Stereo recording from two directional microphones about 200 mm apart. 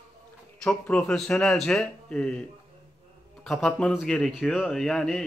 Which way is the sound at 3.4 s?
Centre (ahead or behind).